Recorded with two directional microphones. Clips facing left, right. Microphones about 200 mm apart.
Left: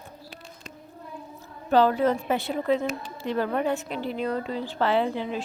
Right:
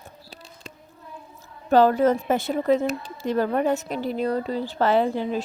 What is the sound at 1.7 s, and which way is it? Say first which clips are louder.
Speech: right 3 dB; 45° right (ahead or behind).